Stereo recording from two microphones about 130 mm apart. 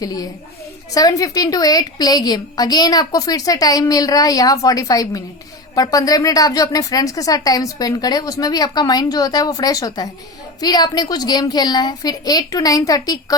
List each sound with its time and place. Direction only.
0.0 s a woman's voice: 30° left (ahead or behind)